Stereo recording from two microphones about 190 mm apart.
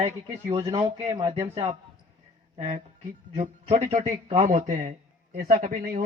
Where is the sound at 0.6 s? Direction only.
20° right (ahead or behind).